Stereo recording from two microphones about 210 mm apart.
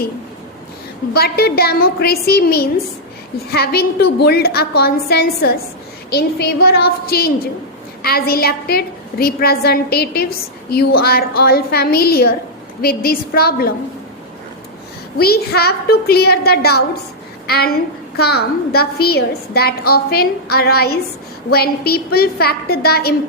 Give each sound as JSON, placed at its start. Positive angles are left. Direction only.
{"t": 1.1, "sound": "a woman's voice", "side_deg": 50}
{"t": 15.2, "sound": "a woman's voice", "side_deg": 50}